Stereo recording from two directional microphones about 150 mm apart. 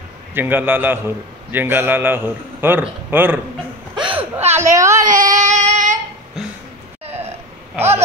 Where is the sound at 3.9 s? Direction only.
30° right (ahead or behind).